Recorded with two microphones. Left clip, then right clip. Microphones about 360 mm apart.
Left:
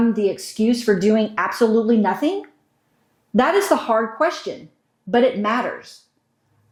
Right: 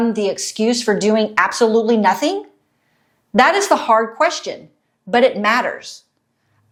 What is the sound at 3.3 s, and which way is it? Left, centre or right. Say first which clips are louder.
A woman's voice: right 4 dB; right.